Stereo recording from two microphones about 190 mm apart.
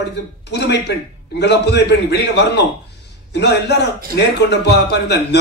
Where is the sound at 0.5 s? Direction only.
65° left (ahead or behind).